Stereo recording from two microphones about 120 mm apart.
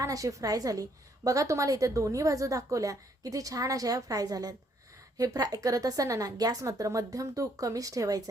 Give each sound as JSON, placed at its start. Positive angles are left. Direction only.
{"t": 0.0, "sound": "a woman's voice", "side_deg": -30}